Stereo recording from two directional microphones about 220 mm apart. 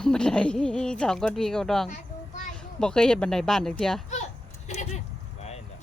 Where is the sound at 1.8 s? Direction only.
30° left (ahead or behind).